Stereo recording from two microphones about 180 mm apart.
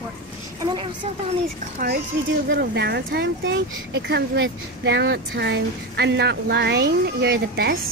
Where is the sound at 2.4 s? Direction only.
70° right (ahead or behind).